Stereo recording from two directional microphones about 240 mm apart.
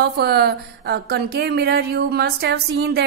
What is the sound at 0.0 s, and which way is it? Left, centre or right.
A woman's voice, right.